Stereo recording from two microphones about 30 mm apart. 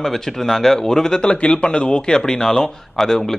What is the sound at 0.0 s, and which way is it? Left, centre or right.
Speech, centre.